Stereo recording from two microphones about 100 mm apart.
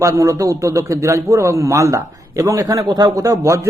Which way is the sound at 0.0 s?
30° right (ahead or behind).